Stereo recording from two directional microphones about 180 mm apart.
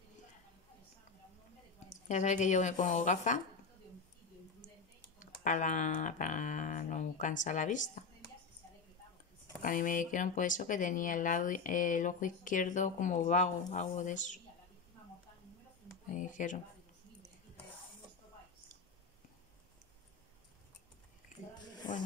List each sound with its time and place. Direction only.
2.0 s speech: 40° left (ahead or behind)
5.2 s speech: 45° left (ahead or behind)
9.6 s speech: 50° left (ahead or behind)
16.1 s speech: 45° left (ahead or behind)
21.3 s a sound: 50° left (ahead or behind)